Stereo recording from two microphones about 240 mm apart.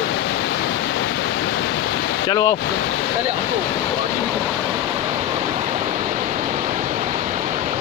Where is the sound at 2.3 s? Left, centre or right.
Centre.